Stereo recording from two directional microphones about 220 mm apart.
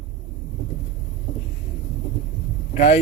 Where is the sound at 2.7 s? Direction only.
30° left (ahead or behind).